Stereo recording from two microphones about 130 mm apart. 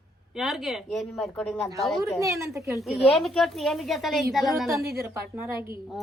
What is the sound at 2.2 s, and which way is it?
Speech, 20° right (ahead or behind).